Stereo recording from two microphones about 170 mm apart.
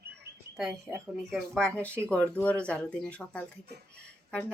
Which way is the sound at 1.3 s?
Centre (ahead or behind).